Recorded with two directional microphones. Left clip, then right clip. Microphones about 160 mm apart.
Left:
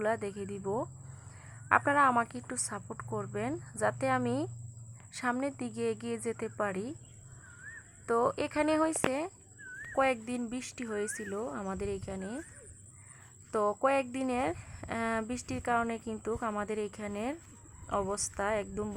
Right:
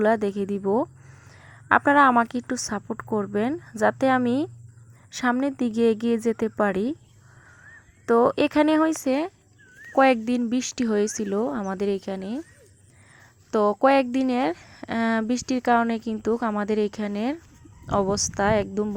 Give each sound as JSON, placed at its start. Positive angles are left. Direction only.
{"t": 0.0, "sound": "speech", "side_deg": -35}
{"t": 8.0, "sound": "speech", "side_deg": -30}
{"t": 13.5, "sound": "speech", "side_deg": -30}